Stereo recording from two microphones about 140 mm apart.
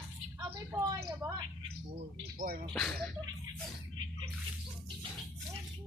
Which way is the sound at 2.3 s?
90° right.